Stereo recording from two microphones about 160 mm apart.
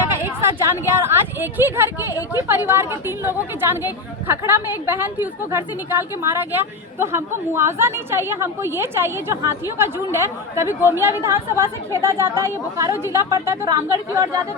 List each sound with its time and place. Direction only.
0.1 s speech: 15° right (ahead or behind)